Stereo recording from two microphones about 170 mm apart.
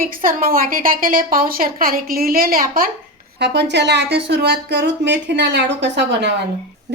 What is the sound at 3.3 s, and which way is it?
A woman's voice, 80° right.